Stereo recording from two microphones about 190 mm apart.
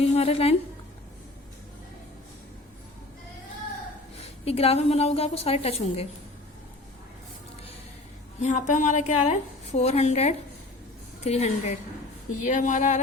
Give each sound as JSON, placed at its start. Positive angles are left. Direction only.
{"t": 0.0, "sound": "a woman's voice", "side_deg": 30}
{"t": 4.2, "sound": "a woman's voice", "side_deg": 30}
{"t": 8.4, "sound": "a woman's voice", "side_deg": 40}